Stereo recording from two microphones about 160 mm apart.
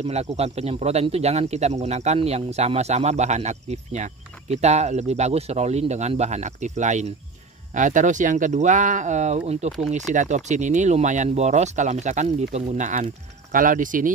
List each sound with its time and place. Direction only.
0.0 s speech: 45° right (ahead or behind)